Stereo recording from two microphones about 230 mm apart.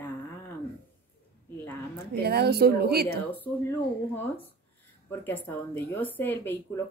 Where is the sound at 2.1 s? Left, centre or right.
Right.